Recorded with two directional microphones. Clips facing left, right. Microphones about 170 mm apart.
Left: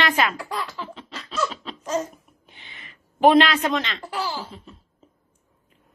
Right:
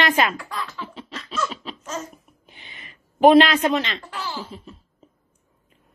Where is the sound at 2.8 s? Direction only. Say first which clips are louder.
Right 3 dB; 15° right (ahead or behind).